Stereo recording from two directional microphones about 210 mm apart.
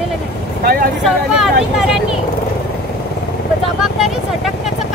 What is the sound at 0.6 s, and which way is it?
Speech, 45° right (ahead or behind).